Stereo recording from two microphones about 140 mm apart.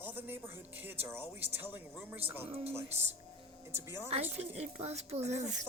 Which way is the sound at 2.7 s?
15° right (ahead or behind).